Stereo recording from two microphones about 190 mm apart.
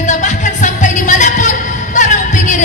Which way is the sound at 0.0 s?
40° left (ahead or behind).